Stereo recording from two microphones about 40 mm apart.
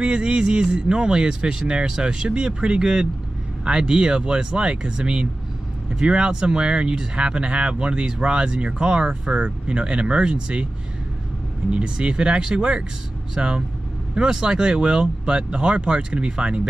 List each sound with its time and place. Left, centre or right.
0.0 s speech: right
11.7 s speech: right